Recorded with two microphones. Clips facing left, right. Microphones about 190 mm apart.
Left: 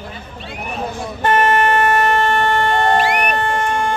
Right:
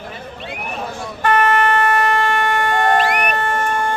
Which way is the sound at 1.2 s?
25° left (ahead or behind).